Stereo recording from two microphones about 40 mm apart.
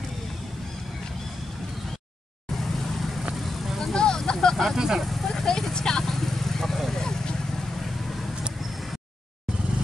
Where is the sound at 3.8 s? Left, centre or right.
Centre.